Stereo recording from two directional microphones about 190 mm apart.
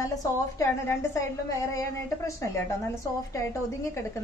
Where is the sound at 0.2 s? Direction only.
15° left (ahead or behind).